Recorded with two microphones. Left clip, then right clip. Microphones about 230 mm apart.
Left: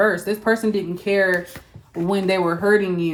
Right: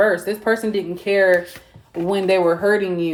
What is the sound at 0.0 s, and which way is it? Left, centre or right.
Speech, left.